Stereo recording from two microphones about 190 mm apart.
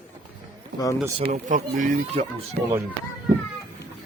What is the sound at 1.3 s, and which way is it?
Speech, 45° right (ahead or behind).